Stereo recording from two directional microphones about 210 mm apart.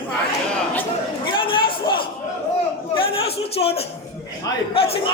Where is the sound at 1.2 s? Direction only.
25° left (ahead or behind).